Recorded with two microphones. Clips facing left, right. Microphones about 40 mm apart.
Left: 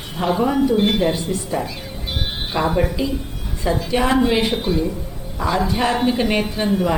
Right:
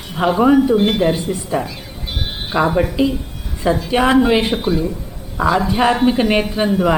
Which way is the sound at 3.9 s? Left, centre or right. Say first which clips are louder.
Right 4 dB; right.